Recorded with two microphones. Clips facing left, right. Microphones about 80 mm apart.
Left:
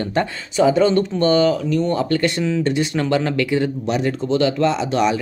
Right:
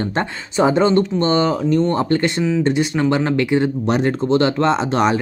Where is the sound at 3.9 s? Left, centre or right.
Right.